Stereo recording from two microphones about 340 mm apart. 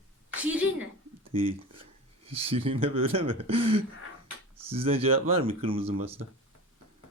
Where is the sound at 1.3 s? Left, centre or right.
Centre.